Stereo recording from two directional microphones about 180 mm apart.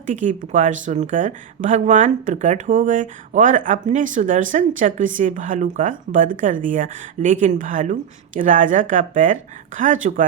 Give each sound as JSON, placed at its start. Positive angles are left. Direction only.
{"t": 0.0, "sound": "speech", "side_deg": -45}